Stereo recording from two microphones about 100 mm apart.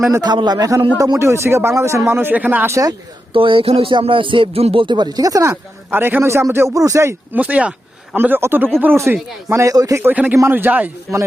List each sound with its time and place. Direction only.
0.1 s speech: 40° right (ahead or behind)
1.2 s speech: 25° right (ahead or behind)
3.3 s speech: 60° right (ahead or behind); by 5.5 s 35° right (ahead or behind)
5.9 s speech: 20° right (ahead or behind)
7.3 s speech: 15° right (ahead or behind)
9.5 s speech: 30° right (ahead or behind)
10.0 s speech: 15° right (ahead or behind)